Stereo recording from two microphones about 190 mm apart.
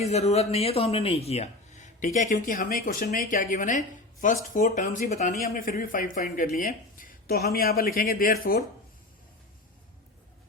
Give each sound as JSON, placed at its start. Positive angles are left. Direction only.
{"t": 0.0, "sound": "speech", "side_deg": 35}